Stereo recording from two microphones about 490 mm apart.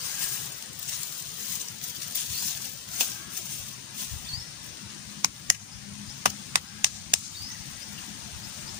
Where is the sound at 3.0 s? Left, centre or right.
Right.